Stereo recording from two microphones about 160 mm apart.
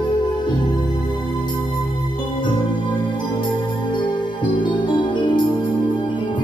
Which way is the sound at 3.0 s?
30° left (ahead or behind).